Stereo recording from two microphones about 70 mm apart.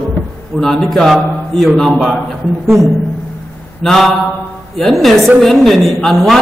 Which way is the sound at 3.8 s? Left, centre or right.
Centre.